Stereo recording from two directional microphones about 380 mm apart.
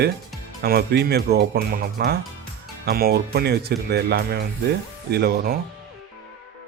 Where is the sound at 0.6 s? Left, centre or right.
Right.